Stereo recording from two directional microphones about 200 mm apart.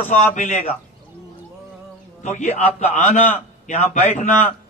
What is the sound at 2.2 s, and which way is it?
A man's voice, 35° left (ahead or behind).